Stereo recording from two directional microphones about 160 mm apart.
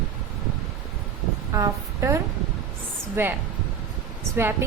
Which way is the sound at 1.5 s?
20° right (ahead or behind).